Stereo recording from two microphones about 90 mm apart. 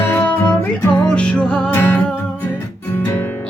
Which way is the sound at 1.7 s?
25° left (ahead or behind).